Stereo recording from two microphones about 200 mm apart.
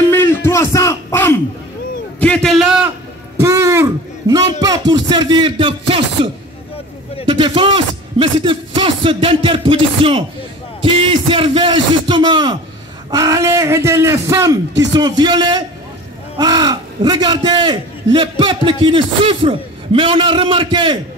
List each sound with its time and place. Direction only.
0.1 s a sound: 10° left (ahead or behind)
2.1 s a man's voice: 5° left (ahead or behind)
3.3 s a man's voice: 15° right (ahead or behind)
7.2 s a man's voice: 25° right (ahead or behind)